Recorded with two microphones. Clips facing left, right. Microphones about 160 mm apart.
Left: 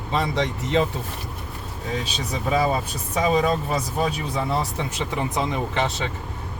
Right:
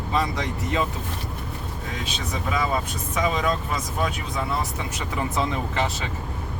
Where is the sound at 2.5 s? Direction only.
35° left (ahead or behind).